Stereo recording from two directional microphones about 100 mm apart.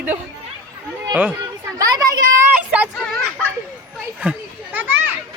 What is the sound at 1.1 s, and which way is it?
Speech, 15° right (ahead or behind).